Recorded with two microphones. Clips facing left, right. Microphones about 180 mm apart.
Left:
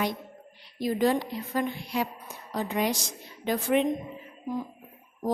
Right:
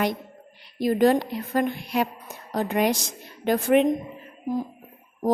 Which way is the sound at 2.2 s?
45° right (ahead or behind).